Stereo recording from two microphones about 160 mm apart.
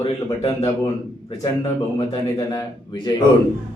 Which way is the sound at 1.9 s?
30° left (ahead or behind).